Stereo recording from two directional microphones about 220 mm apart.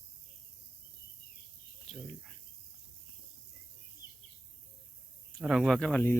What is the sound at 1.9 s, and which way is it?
Cricket, 5° left (ahead or behind).